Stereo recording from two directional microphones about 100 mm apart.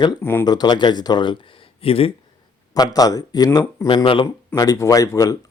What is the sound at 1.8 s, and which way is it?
Speech, 70° left (ahead or behind).